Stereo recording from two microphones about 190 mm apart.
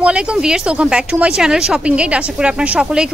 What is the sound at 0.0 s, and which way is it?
Speech, 5° right (ahead or behind).